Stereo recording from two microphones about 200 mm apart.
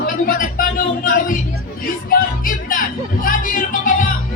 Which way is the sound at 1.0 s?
45° left (ahead or behind).